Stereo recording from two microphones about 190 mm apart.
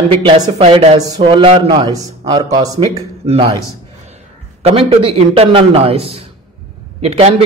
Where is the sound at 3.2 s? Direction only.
30° right (ahead or behind).